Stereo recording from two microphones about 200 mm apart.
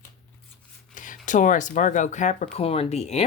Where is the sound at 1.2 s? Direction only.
40° left (ahead or behind).